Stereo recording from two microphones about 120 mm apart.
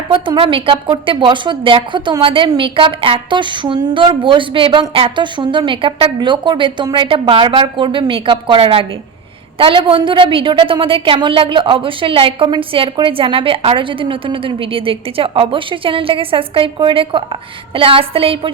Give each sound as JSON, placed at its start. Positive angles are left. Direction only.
{"t": 0.1, "sound": "a woman's voice", "side_deg": -45}